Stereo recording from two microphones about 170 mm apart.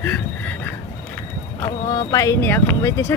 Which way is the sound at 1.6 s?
20° left (ahead or behind).